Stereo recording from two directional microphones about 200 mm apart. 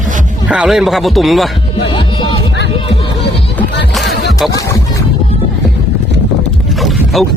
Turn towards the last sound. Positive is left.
turn(degrees=0)  # may be behind; listen again after turning